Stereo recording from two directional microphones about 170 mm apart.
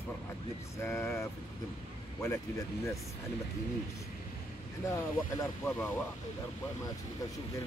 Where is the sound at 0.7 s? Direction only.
15° left (ahead or behind).